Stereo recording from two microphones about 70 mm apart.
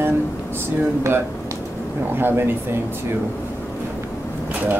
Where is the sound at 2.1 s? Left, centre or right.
Right.